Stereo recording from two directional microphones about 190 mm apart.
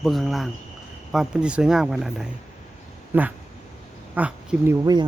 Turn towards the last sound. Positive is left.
turn(degrees=-20)  # may be behind; listen again after turning